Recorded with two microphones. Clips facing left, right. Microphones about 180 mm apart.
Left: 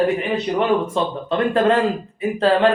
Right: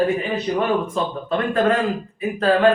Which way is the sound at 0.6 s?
25° left (ahead or behind).